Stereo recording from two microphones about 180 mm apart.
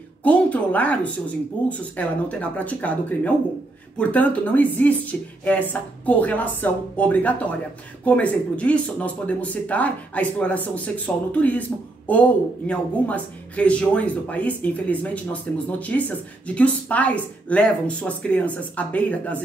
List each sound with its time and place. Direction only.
0.2 s speech: 5° left (ahead or behind)